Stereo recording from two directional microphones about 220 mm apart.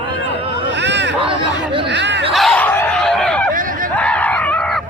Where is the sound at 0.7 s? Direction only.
50° right (ahead or behind).